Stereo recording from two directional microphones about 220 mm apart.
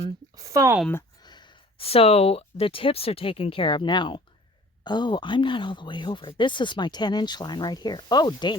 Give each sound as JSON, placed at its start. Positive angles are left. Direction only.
{"t": 0.3, "sound": "speech", "side_deg": -15}
{"t": 0.8, "sound": "speech", "side_deg": 10}
{"t": 1.2, "sound": "speech", "side_deg": 20}